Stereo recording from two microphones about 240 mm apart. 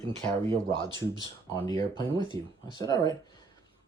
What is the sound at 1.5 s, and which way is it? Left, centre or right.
Speech, centre.